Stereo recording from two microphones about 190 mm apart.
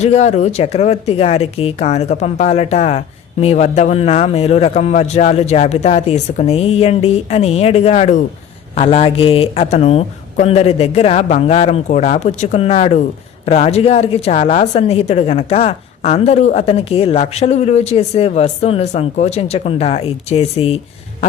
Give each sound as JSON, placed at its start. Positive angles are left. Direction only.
{"t": 0.0, "sound": "speech", "side_deg": 35}